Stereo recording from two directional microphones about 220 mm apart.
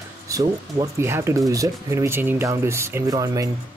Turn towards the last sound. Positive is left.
turn(degrees=-15)  # may be behind; listen again after turning